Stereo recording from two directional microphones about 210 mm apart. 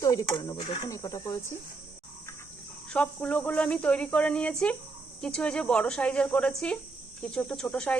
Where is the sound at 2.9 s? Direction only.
5° left (ahead or behind).